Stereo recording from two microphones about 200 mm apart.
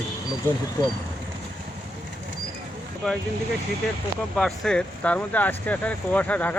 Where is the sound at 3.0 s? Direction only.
Centre (ahead or behind).